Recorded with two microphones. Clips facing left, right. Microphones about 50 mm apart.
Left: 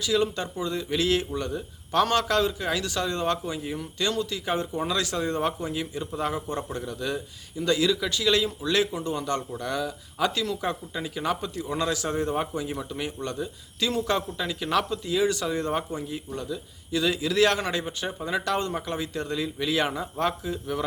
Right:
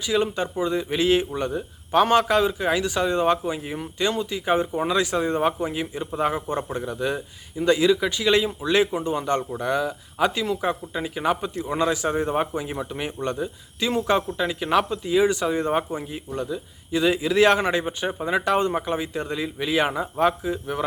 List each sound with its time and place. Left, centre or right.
0.0 s a man's voice: right